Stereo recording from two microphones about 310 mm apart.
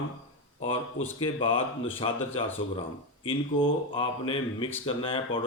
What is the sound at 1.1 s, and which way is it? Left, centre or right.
Speech, centre.